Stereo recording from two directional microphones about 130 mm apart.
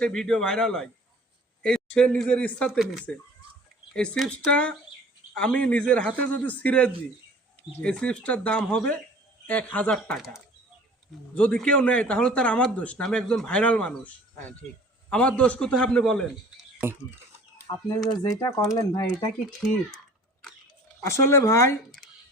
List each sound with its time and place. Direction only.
0.0 s a man's voice: 5° left (ahead or behind)
2.6 s a man's voice: 5° right (ahead or behind)
10.2 s a man's voice: centre (ahead or behind)
11.3 s speech: 10° left (ahead or behind)
17.7 s speech: 30° left (ahead or behind)
21.0 s speech: 20° left (ahead or behind)